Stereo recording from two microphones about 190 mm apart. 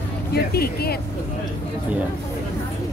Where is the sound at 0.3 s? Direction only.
55° left (ahead or behind).